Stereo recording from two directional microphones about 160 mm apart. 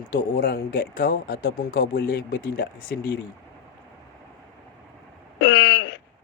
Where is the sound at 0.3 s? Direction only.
65° left (ahead or behind).